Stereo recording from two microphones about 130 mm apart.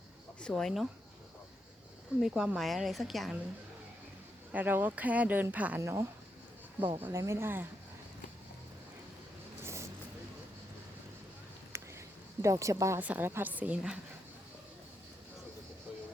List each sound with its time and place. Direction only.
0.4 s a woman's voice: 5° left (ahead or behind)
2.2 s a woman's voice: 5° right (ahead or behind)
4.5 s speech: 15° right (ahead or behind)
9.6 s vehicle: 20° right (ahead or behind)
11.7 s a sound: 20° right (ahead or behind)
13.0 s speech: 15° right (ahead or behind)